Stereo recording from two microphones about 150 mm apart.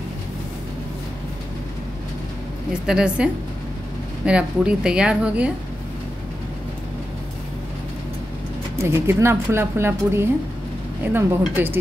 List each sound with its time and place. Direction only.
2.9 s a woman's voice: 5° right (ahead or behind)
4.3 s speech: 5° right (ahead or behind)
8.8 s speech: 15° right (ahead or behind)